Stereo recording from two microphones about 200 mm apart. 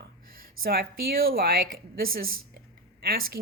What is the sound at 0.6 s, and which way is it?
Speech, 50° right (ahead or behind).